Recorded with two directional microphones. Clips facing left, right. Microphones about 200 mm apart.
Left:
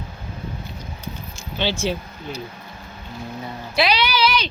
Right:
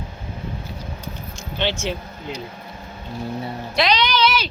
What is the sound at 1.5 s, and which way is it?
Speech, 10° left (ahead or behind).